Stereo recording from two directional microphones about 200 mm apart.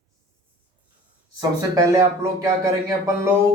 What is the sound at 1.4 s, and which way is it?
Speech, 15° right (ahead or behind).